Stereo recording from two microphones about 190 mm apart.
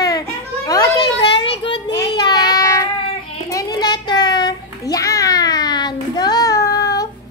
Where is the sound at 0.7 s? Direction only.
20° left (ahead or behind).